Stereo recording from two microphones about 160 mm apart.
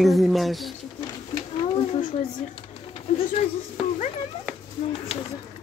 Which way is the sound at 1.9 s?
55° left (ahead or behind).